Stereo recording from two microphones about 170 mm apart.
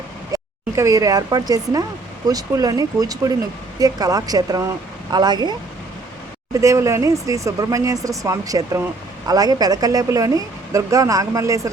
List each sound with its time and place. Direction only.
0.3 s speech: 20° right (ahead or behind)